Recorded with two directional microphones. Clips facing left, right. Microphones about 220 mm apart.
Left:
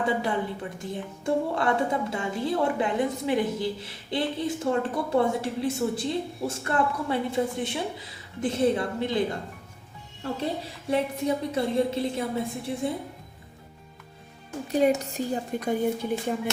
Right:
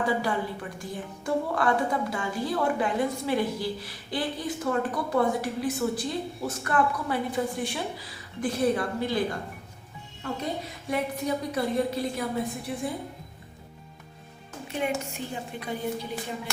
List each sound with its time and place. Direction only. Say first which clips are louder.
0.0 s a woman's voice: left 1 dB; 25° left (ahead or behind)
14.7 s a woman's voice: left 7 dB; 40° left (ahead or behind)